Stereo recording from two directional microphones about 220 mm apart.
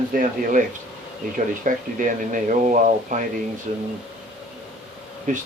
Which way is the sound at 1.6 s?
35° right (ahead or behind).